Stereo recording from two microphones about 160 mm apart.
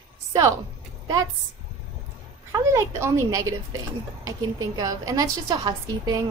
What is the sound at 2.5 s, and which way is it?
A woman's voice, 20° right (ahead or behind).